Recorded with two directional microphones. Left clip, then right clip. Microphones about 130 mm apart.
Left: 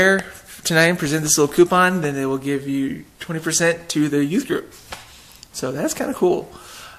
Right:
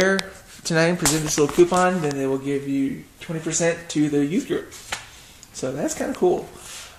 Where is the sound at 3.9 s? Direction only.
20° left (ahead or behind).